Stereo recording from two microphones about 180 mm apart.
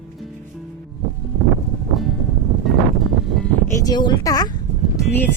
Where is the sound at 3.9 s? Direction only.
25° left (ahead or behind).